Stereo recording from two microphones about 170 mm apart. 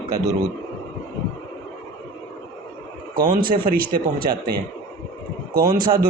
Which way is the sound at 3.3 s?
60° right (ahead or behind).